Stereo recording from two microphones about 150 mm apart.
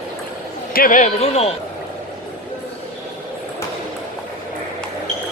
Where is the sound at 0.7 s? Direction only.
65° left (ahead or behind); by 1.5 s 45° left (ahead or behind).